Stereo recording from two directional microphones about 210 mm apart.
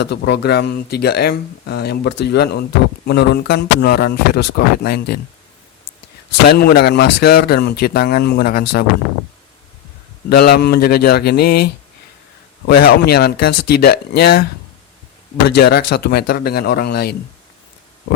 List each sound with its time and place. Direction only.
0.0 s speech: 55° left (ahead or behind)
6.5 s speech: 50° left (ahead or behind)
10.2 s speech: 50° left (ahead or behind)
15.4 s speech: 50° left (ahead or behind)